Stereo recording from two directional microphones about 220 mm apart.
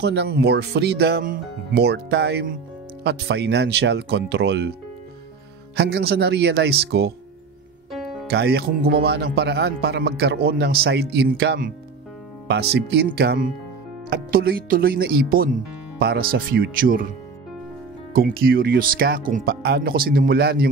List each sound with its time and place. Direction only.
0.0 s speech: 50° right (ahead or behind)
5.8 s speech: 45° right (ahead or behind)
7.9 s music: centre (ahead or behind)
8.3 s speech: 45° right (ahead or behind)
18.1 s speech: 40° right (ahead or behind)